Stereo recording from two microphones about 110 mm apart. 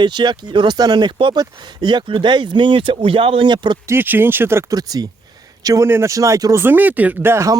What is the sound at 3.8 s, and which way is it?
Speech, 20° right (ahead or behind).